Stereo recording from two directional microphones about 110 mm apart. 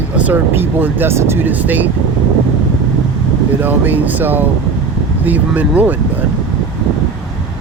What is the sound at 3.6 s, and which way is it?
Speech, 15° right (ahead or behind).